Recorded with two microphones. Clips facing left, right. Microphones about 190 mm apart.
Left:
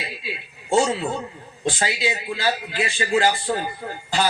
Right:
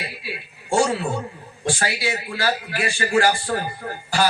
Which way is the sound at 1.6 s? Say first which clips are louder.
Even; 20° left (ahead or behind).